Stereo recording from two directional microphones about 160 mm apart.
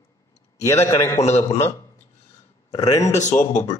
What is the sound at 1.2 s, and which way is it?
Speech, 45° left (ahead or behind).